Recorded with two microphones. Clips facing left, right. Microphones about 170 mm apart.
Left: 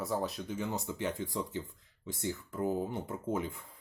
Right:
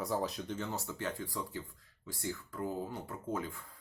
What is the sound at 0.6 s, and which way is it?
Speech, 20° left (ahead or behind).